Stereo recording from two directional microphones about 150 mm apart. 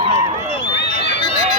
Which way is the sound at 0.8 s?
90° left.